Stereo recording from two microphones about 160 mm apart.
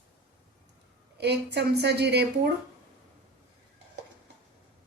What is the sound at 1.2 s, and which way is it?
A woman's voice, 90° right.